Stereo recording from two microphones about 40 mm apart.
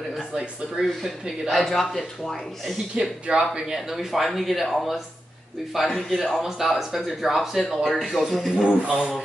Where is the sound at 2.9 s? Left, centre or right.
Right.